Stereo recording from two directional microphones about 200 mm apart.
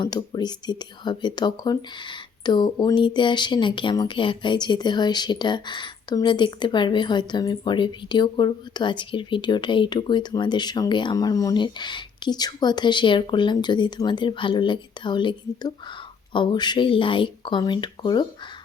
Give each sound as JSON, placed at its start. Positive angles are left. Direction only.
{"t": 0.0, "sound": "speech", "side_deg": 20}